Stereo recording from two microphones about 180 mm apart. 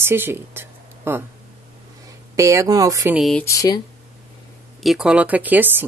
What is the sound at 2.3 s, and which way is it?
Speech, 15° right (ahead or behind).